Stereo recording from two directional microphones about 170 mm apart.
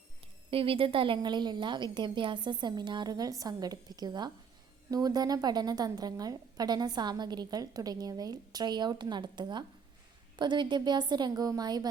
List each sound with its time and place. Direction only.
0.5 s a woman's voice: 30° right (ahead or behind)